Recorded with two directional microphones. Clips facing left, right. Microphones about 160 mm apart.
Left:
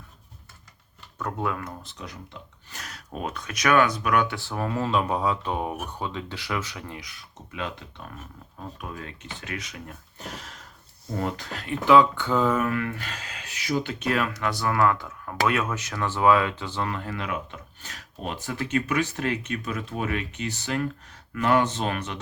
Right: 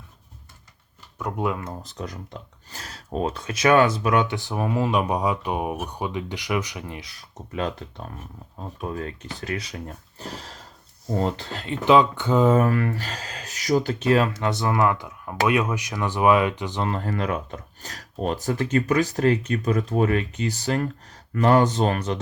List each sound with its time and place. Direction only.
1.2 s speech: 15° right (ahead or behind)
1.8 s speech: 40° right (ahead or behind)
2.6 s speech: 30° right (ahead or behind)
7.0 s speech: 35° right (ahead or behind); by 12.5 s 20° right (ahead or behind)
12.5 s speech: 35° right (ahead or behind); by 16.9 s 15° right (ahead or behind)
16.9 s speech: 40° right (ahead or behind)